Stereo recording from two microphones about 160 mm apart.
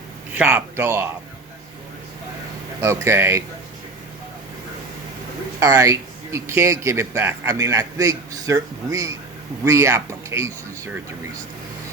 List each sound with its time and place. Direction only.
0.3 s speech: 15° right (ahead or behind)
2.8 s speech: 20° right (ahead or behind)
5.5 s a man's voice: 20° right (ahead or behind)